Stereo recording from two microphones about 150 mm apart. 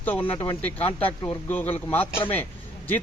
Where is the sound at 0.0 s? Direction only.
10° left (ahead or behind).